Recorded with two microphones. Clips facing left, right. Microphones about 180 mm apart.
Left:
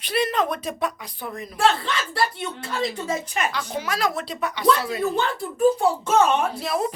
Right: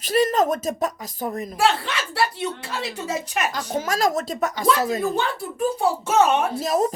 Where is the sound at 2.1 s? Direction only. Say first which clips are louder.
Right 4 dB; 10° right (ahead or behind).